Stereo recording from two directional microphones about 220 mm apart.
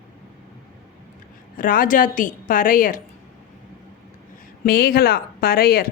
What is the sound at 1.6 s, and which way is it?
A woman's voice, 40° left (ahead or behind).